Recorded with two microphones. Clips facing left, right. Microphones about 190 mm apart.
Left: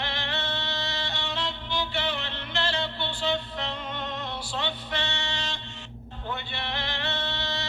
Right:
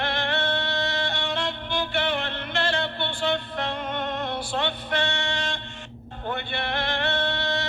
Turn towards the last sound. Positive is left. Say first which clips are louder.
# right 6 dB
turn(degrees=-55)  # may be behind; listen again after turning